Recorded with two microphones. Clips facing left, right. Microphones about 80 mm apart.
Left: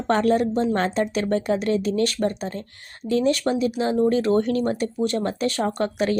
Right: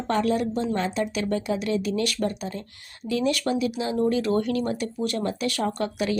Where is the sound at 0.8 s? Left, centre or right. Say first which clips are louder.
Left 4 dB; left.